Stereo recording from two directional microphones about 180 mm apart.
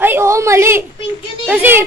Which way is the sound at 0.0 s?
15° right (ahead or behind).